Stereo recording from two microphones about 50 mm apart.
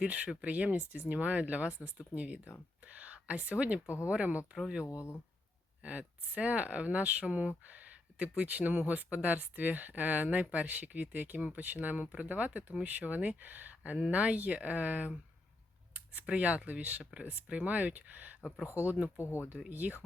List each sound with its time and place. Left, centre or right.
0.0 s speech: right
4.9 s speech: left
5.8 s speech: right
19.1 s speech: left
19.7 s speech: right